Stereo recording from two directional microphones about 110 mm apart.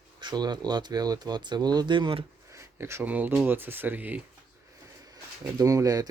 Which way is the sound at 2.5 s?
25° right (ahead or behind).